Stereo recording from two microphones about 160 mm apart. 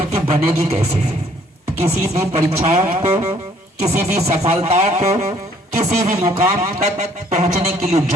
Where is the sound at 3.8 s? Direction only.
40° right (ahead or behind).